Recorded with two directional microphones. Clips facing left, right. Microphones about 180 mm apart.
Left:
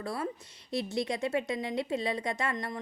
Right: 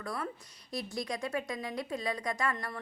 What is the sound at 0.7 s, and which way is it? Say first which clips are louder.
A woman's voice: left 5 dB; 25° left (ahead or behind).